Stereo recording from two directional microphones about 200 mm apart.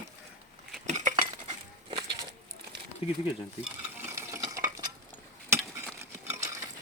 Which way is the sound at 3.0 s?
30° left (ahead or behind).